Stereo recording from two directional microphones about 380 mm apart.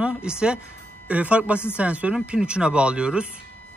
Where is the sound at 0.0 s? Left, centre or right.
Centre.